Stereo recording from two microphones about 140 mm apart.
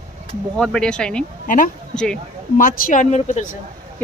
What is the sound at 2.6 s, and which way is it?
Speech, 80° left.